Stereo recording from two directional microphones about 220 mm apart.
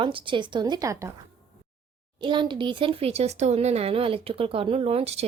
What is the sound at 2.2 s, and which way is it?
Speech, 20° right (ahead or behind).